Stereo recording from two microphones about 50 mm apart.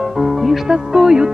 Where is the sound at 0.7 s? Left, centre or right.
Centre.